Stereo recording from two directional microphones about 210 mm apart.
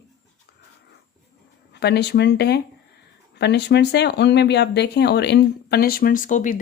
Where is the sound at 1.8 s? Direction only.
55° left (ahead or behind).